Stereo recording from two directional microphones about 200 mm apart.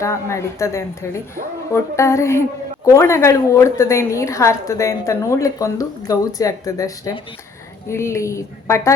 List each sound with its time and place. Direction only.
0.0 s a woman's voice: 15° left (ahead or behind)